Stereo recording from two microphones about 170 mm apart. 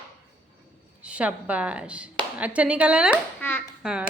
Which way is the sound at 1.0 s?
5° right (ahead or behind).